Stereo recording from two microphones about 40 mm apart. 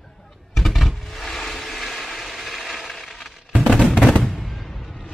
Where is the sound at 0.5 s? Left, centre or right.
Centre.